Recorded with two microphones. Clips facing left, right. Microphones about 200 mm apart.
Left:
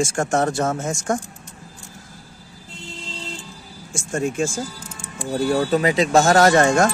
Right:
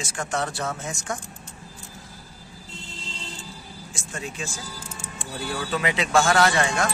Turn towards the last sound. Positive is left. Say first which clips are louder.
# left 8 dB
turn(degrees=45)  # may be behind; listen again after turning